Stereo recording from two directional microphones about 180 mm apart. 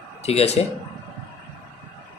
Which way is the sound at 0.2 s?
35° left (ahead or behind).